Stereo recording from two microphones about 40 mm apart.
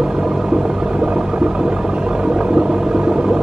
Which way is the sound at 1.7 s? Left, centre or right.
Centre.